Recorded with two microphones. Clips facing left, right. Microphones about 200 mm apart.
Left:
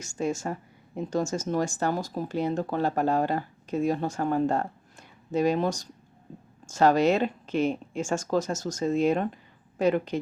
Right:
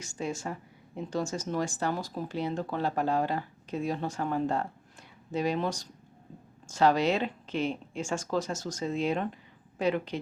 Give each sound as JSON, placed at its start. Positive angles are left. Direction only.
{"t": 0.0, "sound": "speech", "side_deg": 45}